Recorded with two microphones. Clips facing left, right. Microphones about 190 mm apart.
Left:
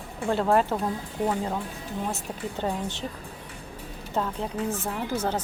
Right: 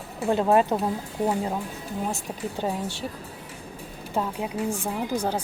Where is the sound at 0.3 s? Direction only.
20° right (ahead or behind).